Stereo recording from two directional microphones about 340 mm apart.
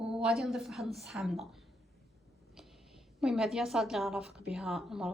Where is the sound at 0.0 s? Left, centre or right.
Centre.